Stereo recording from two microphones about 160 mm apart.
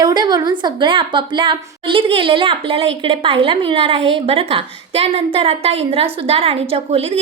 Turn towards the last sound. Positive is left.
turn(degrees=-40)  # may be behind; listen again after turning